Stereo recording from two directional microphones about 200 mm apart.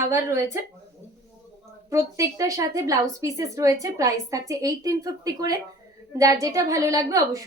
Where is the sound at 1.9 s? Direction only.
15° right (ahead or behind).